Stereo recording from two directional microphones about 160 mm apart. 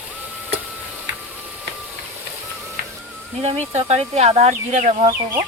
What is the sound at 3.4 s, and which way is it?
Speech, 45° right (ahead or behind).